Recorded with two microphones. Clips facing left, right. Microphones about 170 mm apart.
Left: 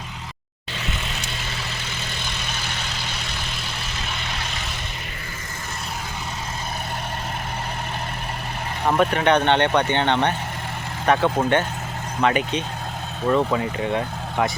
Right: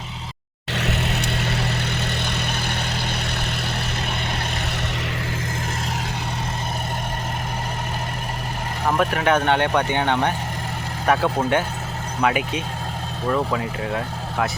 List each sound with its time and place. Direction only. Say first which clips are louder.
0.7 s vehicle: right 6 dB; 70° right (ahead or behind); by 3.2 s 55° right (ahead or behind)
8.9 s speech: left 1 dB; centre (ahead or behind)